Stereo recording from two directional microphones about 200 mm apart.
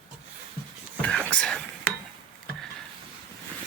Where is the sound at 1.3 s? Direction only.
5° left (ahead or behind).